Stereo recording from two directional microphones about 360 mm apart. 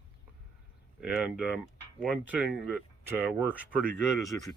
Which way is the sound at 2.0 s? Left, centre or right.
Centre.